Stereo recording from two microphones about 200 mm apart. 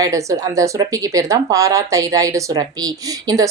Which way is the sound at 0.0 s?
15° right (ahead or behind).